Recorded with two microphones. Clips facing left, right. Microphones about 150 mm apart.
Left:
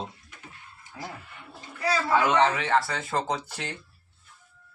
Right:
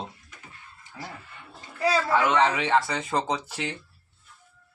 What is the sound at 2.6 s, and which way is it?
Speech, 15° right (ahead or behind).